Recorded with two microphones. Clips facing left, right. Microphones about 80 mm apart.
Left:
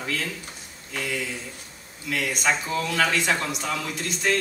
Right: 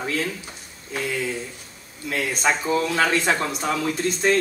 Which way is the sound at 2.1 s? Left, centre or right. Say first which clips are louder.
Right 2 dB; right.